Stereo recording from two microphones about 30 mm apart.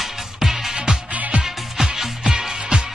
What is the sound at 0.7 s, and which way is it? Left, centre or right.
Music, right.